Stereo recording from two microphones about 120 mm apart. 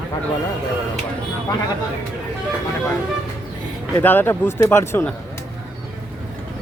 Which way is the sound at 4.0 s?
15° left (ahead or behind).